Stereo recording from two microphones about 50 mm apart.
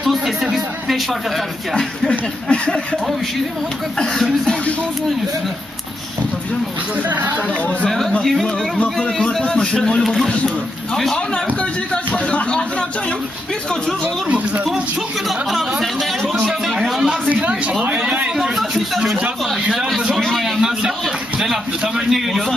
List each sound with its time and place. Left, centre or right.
0.0 s speech: centre
2.5 s speech: left
7.1 s speech: right
8.2 s a man's voice: centre
11.9 s speech: left
15.2 s speech: centre
16.6 s a sound: centre
17.3 s a man's voice: right
20.2 s a sound: centre
21.4 s a man's voice: centre